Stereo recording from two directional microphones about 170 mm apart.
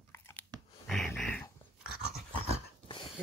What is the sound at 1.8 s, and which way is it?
Dog, 5° right (ahead or behind).